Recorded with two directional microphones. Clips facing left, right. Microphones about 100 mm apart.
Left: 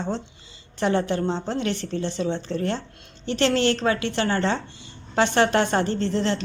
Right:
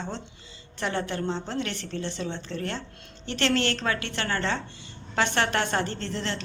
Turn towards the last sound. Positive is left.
turn(degrees=25)  # may be behind; listen again after turning